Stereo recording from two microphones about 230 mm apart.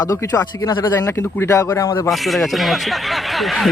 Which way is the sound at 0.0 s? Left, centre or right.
Centre.